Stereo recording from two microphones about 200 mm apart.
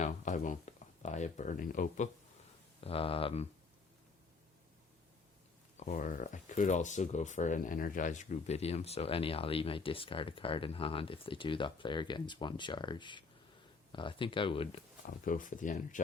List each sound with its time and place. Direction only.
0.0 s speech: 35° left (ahead or behind)
2.8 s speech: 30° left (ahead or behind)
5.8 s speech: 40° left (ahead or behind)
15.0 s speech: 40° left (ahead or behind)